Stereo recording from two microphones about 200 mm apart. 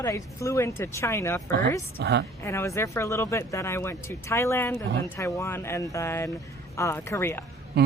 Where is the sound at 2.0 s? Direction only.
55° right (ahead or behind).